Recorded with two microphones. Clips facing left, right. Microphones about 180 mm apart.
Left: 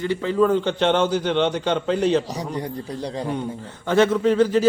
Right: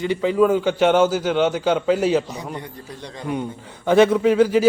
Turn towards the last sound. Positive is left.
turn(degrees=-10)  # may be behind; listen again after turning